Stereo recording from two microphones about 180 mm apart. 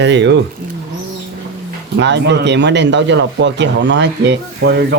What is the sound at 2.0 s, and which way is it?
Speech, 75° right (ahead or behind).